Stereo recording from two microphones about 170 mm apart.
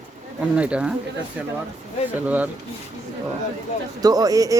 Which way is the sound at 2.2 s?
10° right (ahead or behind).